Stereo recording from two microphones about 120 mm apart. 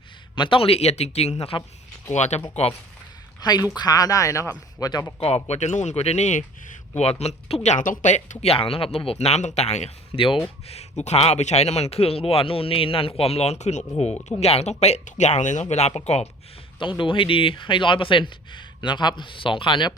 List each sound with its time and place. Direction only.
0.3 s speech: 45° left (ahead or behind); by 2.8 s 60° left (ahead or behind)
3.4 s speech: 35° left (ahead or behind)
5.2 s speech: 65° left (ahead or behind)
6.9 s speech: 65° left (ahead or behind)
10.2 s speech: 45° left (ahead or behind)
10.7 s speech: 65° left (ahead or behind); by 15.6 s 90° left
15.9 s speech: 60° left (ahead or behind)
17.0 s speech: 45° left (ahead or behind)